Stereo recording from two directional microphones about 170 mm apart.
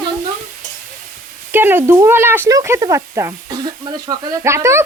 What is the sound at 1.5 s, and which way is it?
Speech, 10° right (ahead or behind).